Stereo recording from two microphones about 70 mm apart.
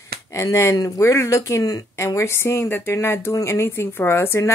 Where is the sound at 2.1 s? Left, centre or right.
Left.